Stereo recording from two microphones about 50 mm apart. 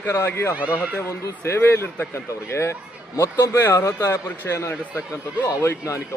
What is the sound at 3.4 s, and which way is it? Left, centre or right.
A man's voice, left.